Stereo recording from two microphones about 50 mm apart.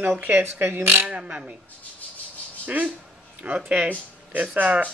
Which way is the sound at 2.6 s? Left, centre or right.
Right.